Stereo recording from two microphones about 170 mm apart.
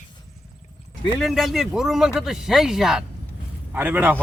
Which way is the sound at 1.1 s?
Centre (ahead or behind).